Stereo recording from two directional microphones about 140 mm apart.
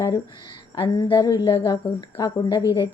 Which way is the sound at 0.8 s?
35° left (ahead or behind).